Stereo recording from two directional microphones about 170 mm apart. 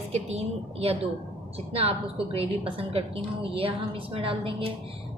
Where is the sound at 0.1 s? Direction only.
40° right (ahead or behind).